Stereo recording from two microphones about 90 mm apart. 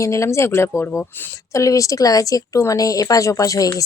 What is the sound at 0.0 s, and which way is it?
A woman's voice, 35° left (ahead or behind).